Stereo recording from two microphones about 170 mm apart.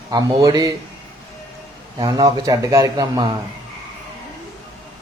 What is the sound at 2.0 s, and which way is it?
Speech, 20° right (ahead or behind).